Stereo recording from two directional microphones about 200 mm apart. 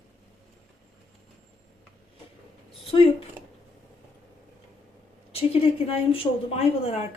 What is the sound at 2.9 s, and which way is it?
Speech, 25° left (ahead or behind).